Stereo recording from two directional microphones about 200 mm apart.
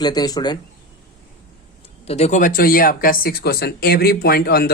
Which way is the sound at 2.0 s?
30° left (ahead or behind).